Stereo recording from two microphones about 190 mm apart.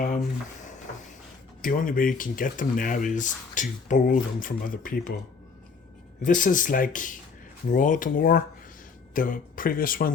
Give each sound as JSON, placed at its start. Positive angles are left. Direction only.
{"t": 1.6, "sound": "speech", "side_deg": 45}
{"t": 6.2, "sound": "speech", "side_deg": 45}